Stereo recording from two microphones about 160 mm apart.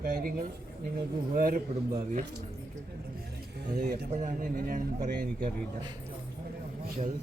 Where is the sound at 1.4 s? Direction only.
60° right (ahead or behind).